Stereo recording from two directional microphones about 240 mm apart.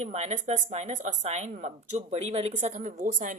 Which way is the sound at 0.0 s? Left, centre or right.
Right.